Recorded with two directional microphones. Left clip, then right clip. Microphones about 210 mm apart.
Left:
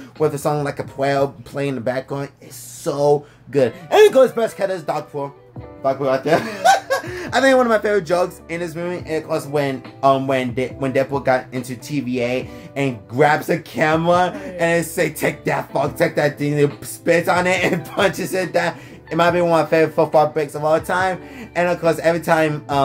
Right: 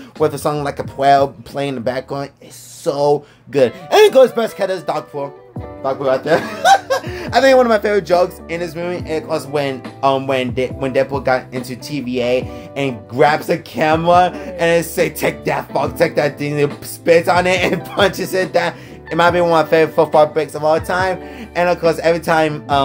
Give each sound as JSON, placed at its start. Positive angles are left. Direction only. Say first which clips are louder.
{"t": 0.2, "sound": "speech", "louder": "right 2 dB", "side_deg": -20}
{"t": 6.0, "sound": "speech", "louder": "right 4 dB", "side_deg": -20}